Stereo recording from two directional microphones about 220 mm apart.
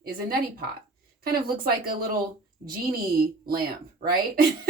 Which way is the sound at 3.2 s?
45° right (ahead or behind).